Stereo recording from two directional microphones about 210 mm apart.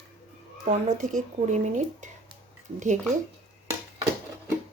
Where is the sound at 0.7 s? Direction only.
35° right (ahead or behind).